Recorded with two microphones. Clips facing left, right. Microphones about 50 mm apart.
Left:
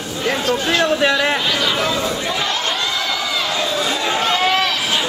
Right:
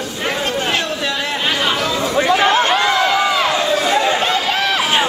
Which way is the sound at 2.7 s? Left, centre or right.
Right.